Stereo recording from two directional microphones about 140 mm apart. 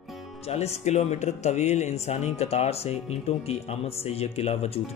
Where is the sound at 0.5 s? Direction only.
50° left (ahead or behind).